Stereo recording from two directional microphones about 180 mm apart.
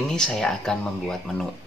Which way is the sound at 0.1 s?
5° left (ahead or behind).